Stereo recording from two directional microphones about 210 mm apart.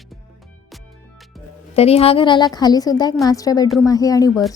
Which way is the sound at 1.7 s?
30° left (ahead or behind).